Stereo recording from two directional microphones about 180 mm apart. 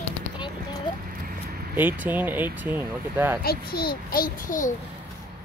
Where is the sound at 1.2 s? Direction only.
55° right (ahead or behind).